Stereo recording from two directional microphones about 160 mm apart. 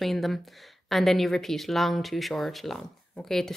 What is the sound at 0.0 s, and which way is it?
Speech, centre (ahead or behind).